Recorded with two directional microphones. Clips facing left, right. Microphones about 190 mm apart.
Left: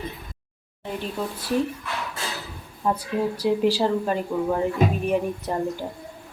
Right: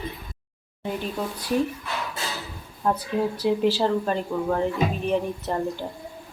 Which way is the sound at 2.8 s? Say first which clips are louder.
Even; 10° left (ahead or behind).